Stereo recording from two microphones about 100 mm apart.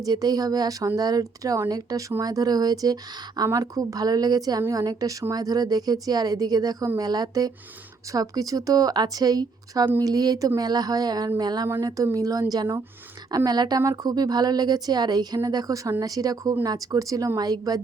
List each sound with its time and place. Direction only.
0.0 s speech: 40° right (ahead or behind)